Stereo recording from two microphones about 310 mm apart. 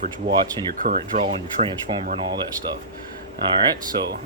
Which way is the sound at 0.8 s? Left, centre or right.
Right.